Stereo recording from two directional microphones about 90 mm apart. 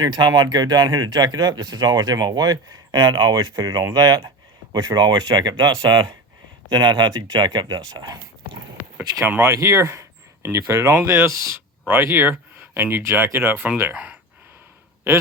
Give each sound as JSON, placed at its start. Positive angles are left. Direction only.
{"t": 0.0, "sound": "speech", "side_deg": -50}
{"t": 9.0, "sound": "speech", "side_deg": -25}
{"t": 13.9, "sound": "speech", "side_deg": -15}